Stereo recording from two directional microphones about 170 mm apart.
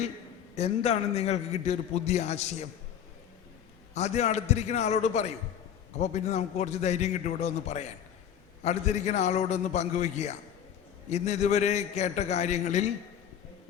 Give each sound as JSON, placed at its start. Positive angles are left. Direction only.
{"t": 0.5, "sound": "a man's voice", "side_deg": 40}
{"t": 3.9, "sound": "a man's voice", "side_deg": 40}